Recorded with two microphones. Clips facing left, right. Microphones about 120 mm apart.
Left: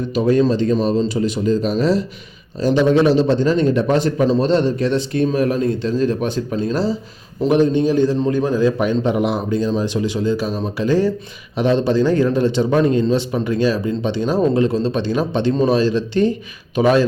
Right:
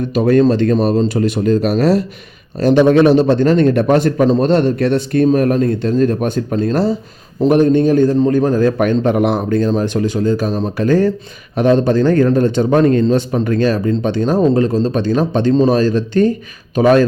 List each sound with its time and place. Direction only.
0.5 s a man's voice: 60° right (ahead or behind)